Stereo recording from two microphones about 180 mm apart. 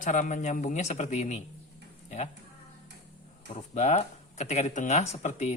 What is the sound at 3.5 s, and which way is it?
Speech, 40° left (ahead or behind).